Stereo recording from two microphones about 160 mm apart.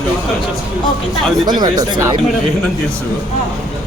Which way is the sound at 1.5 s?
25° right (ahead or behind).